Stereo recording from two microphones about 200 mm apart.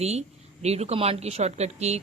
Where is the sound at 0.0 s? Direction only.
35° right (ahead or behind).